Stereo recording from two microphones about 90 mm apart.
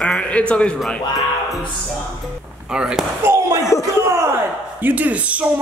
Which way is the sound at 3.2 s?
35° right (ahead or behind).